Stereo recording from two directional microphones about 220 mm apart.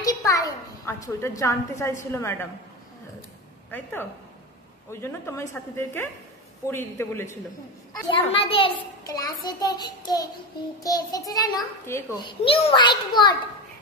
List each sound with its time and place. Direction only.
0.0 s a woman's voice: 15° left (ahead or behind)
3.7 s a woman's voice: 10° left (ahead or behind)
8.1 s a child's voice: 25° left (ahead or behind)
12.3 s a child's voice: 25° left (ahead or behind)